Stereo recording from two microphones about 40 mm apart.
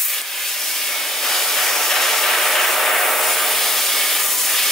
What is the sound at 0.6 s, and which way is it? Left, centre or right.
Hair dryer, centre.